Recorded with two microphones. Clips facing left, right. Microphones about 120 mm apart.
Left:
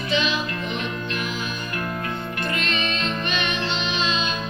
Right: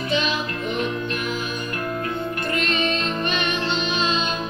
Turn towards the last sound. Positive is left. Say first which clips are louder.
# right 2 dB
turn(degrees=-45)  # may be behind; listen again after turning